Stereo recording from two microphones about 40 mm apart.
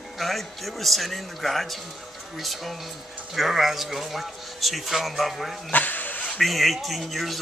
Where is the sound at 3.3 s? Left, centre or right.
Centre.